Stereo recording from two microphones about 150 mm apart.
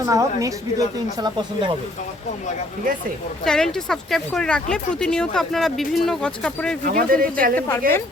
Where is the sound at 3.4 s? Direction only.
5° left (ahead or behind).